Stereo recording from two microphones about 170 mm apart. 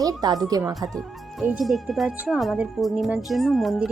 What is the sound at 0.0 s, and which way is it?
Speech, 20° right (ahead or behind).